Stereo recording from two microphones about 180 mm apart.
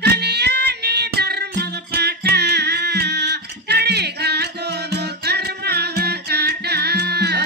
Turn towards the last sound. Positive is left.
turn(degrees=-65)  # may be behind; listen again after turning